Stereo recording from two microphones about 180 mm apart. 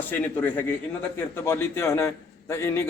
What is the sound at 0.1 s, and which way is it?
A man's voice, 10° left (ahead or behind).